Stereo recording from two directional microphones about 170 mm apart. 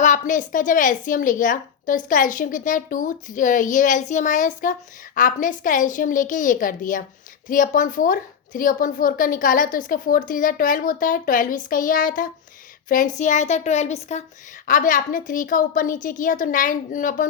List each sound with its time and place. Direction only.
0.0 s a woman's voice: 50° left (ahead or behind)